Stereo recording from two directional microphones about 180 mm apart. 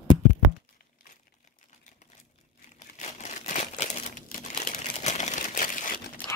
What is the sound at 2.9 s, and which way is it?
Crumpling, 40° left (ahead or behind).